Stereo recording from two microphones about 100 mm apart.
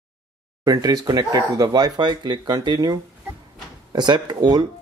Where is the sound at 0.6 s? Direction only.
45° right (ahead or behind).